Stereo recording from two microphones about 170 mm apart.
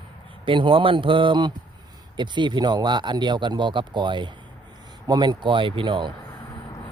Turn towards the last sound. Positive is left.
turn(degrees=-30)  # may be behind; listen again after turning